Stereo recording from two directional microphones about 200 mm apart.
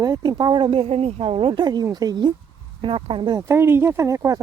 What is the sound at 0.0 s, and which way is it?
Speech, 20° right (ahead or behind).